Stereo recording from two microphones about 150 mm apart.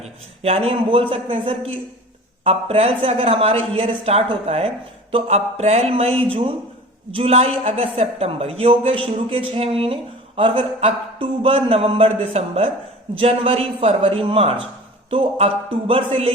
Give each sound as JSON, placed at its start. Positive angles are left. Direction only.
{"t": 0.0, "sound": "a woman's voice", "side_deg": -45}